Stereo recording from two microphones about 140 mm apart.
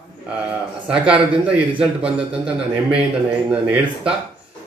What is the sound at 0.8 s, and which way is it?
A man's voice, 5° right (ahead or behind).